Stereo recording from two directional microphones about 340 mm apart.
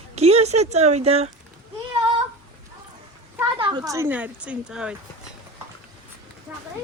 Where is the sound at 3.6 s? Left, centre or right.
Centre.